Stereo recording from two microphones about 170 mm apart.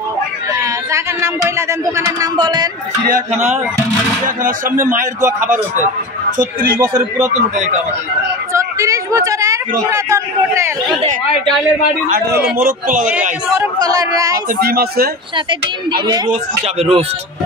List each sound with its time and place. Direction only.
0.5 s speech: 15° right (ahead or behind)
3.1 s a man's voice: 45° right (ahead or behind)
6.3 s a man's voice: 55° right (ahead or behind)
8.5 s a sound: 20° right (ahead or behind)
12.1 s a man's voice: 70° right (ahead or behind)
12.6 s a man's voice: 50° right (ahead or behind)
13.6 s speech: 20° right (ahead or behind)
14.6 s speech: 65° right (ahead or behind)
16.6 s speech: 40° right (ahead or behind)